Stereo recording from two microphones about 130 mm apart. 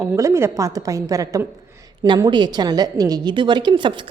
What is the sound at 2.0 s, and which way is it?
A woman's voice, 35° right (ahead or behind).